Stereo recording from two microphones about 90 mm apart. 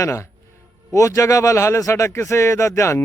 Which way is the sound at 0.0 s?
35° left (ahead or behind).